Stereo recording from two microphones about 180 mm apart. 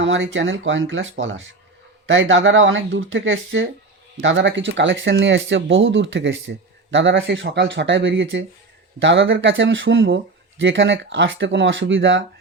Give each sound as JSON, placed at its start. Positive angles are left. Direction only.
{"t": 0.0, "sound": "speech", "side_deg": -90}